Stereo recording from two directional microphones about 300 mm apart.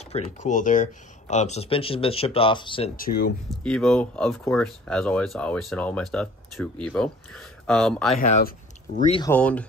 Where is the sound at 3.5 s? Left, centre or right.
Centre.